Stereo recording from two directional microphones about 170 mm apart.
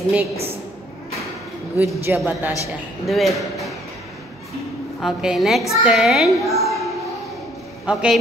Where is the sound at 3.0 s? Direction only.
Centre (ahead or behind).